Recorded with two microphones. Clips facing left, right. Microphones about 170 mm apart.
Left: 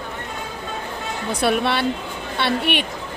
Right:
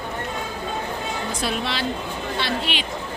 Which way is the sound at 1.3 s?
60° left (ahead or behind).